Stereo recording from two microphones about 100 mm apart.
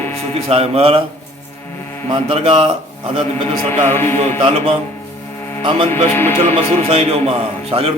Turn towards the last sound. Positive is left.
turn(degrees=-80)